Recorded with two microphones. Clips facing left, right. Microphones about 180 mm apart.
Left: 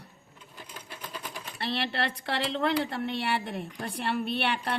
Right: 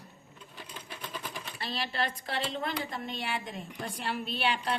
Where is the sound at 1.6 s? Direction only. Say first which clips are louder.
Left 4 dB; 65° left (ahead or behind).